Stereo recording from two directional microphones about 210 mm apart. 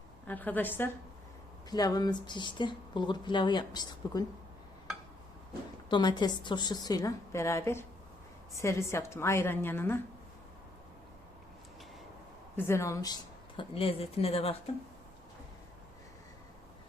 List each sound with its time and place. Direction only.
0.3 s a woman's voice: 10° left (ahead or behind)
5.9 s a woman's voice: 20° left (ahead or behind)
12.5 s a woman's voice: 10° left (ahead or behind)
13.6 s speech: 25° left (ahead or behind)